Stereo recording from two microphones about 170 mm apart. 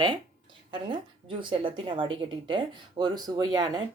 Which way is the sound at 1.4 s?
30° right (ahead or behind).